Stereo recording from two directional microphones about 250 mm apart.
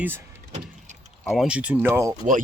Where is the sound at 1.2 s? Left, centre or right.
Centre.